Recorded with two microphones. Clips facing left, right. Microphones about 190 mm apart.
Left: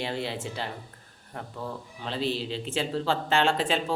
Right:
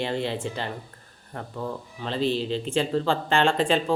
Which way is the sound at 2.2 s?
45° right (ahead or behind).